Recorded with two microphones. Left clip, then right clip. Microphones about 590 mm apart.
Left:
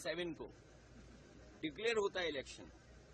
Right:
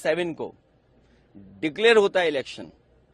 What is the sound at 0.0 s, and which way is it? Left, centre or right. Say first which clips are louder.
Speech: right 18 dB; right.